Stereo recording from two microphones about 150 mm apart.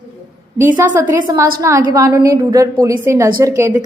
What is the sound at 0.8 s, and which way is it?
A woman's voice, 20° right (ahead or behind).